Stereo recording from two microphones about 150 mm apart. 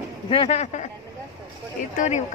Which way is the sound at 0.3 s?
40° left (ahead or behind).